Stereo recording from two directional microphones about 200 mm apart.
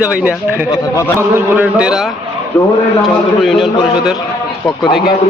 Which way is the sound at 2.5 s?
10° left (ahead or behind).